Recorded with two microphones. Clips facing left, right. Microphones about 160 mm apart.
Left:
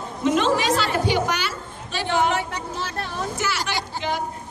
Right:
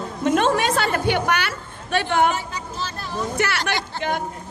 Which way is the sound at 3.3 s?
60° right (ahead or behind).